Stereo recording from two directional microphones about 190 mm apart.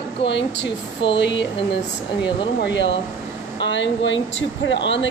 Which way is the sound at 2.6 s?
65° left (ahead or behind).